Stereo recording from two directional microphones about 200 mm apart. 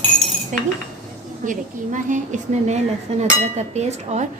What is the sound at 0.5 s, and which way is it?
Speech, 40° right (ahead or behind).